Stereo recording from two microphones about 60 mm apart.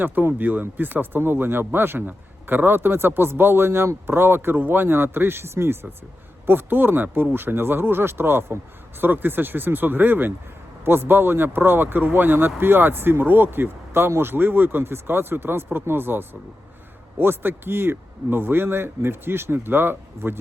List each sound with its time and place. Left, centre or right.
0.0 s speech: right